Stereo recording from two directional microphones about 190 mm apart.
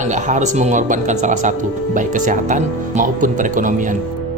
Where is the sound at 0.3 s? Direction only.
40° right (ahead or behind).